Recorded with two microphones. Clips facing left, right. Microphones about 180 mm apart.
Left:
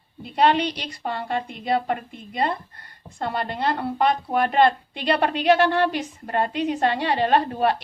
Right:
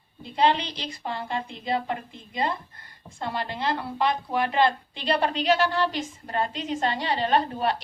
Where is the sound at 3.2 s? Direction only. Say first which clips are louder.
Left 4 dB; 55° left (ahead or behind).